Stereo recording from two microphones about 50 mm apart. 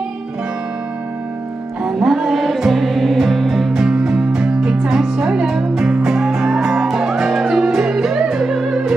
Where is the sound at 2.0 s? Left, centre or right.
Centre.